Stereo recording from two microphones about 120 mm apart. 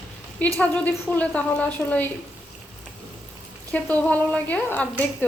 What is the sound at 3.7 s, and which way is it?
Speech, 10° left (ahead or behind).